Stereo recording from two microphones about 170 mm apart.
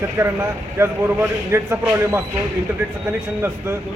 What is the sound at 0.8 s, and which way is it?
A man's voice, 15° right (ahead or behind).